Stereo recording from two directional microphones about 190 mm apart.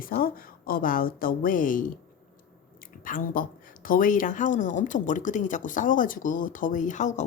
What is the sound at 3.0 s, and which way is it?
Speech, 45° left (ahead or behind).